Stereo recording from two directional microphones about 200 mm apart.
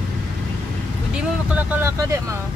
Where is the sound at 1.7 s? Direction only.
10° right (ahead or behind).